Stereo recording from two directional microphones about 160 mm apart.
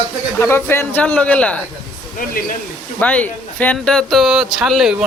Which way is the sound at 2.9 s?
10° left (ahead or behind).